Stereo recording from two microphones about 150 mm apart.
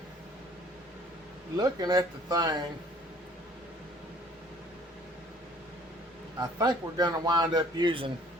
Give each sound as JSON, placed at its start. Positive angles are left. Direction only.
{"t": 1.5, "sound": "a man's voice", "side_deg": -25}
{"t": 6.4, "sound": "a man's voice", "side_deg": -25}